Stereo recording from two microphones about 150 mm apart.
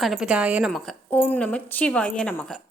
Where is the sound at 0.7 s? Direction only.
5° left (ahead or behind).